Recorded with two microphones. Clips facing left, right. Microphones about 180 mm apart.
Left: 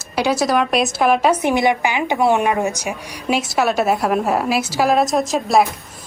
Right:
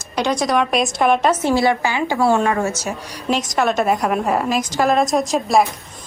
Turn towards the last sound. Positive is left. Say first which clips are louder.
# even
turn(degrees=0)  # may be behind; listen again after turning